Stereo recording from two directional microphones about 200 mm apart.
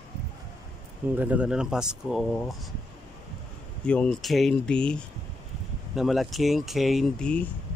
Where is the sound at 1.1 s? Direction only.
10° right (ahead or behind).